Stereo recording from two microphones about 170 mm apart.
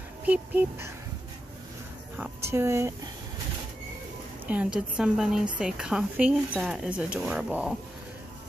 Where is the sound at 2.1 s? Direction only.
15° right (ahead or behind).